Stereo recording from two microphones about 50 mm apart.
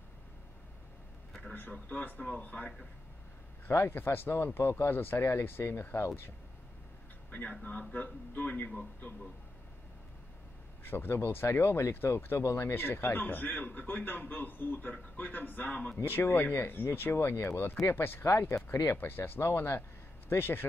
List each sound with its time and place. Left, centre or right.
1.5 s a man's voice: left
3.9 s speech: left
7.9 s a man's voice: left
10.8 s speech: left
12.4 s speech: left
12.7 s a man's voice: left
15.7 s speech: left
16.1 s speech: left